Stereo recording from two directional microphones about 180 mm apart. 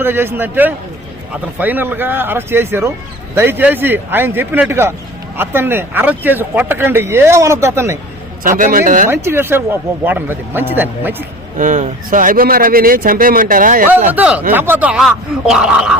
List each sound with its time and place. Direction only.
0.0 s speech: 10° right (ahead or behind)
8.4 s a man's voice: 45° right (ahead or behind)
9.0 s speech: 15° right (ahead or behind)
11.5 s a man's voice: 45° right (ahead or behind)
14.1 s speech: 10° right (ahead or behind)